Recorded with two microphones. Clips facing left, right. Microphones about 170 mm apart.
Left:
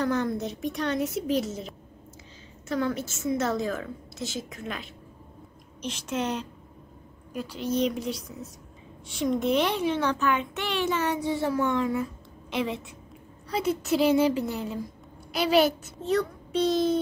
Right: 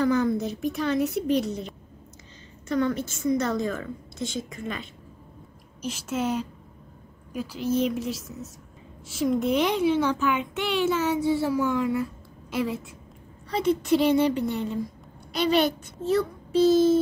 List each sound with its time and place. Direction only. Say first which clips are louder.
0.0 s a woman's voice: right 4 dB; centre (ahead or behind)
11.1 s speech: right 5 dB; 15° left (ahead or behind)
11.4 s a woman's voice: right 1 dB; 5° right (ahead or behind)